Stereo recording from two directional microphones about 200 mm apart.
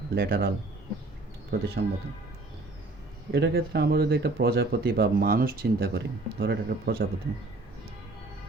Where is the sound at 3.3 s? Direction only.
55° right (ahead or behind).